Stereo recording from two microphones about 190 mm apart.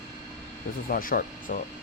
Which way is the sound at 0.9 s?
50° left (ahead or behind).